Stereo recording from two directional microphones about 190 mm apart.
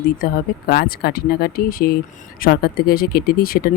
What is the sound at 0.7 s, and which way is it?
Speech, 55° left (ahead or behind).